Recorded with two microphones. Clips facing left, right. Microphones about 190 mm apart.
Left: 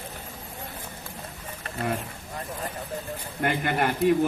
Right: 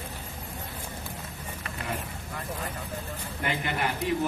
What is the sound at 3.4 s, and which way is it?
Speech, 50° left (ahead or behind).